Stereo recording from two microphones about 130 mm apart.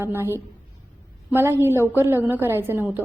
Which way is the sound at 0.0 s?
20° right (ahead or behind).